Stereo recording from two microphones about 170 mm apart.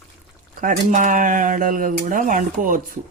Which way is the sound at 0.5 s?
50° right (ahead or behind).